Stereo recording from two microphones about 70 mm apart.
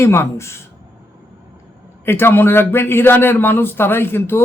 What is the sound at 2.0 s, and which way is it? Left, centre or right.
Speech, left.